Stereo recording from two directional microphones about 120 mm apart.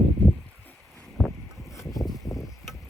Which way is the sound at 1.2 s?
5° left (ahead or behind).